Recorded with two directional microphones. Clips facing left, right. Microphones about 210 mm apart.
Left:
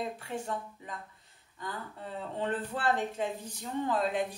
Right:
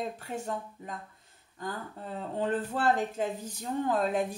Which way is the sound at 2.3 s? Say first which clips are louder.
Right 4 dB; 45° right (ahead or behind).